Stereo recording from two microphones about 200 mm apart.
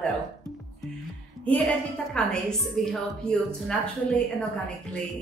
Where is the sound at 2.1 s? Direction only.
5° left (ahead or behind).